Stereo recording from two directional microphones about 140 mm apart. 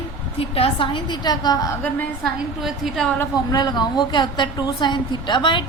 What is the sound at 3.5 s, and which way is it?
A woman's voice, 30° left (ahead or behind).